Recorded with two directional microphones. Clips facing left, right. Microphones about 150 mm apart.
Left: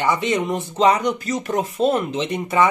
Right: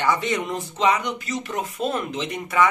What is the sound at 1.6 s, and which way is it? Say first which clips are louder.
Speech: left 7 dB; 30° left (ahead or behind).